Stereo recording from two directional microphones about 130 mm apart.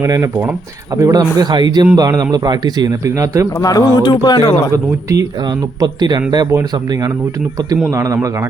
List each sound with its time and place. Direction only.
0.0 s a man's voice: 20° right (ahead or behind)
3.6 s a man's voice: 30° left (ahead or behind)
5.8 s a man's voice: 35° right (ahead or behind)
7.9 s speech: 25° right (ahead or behind)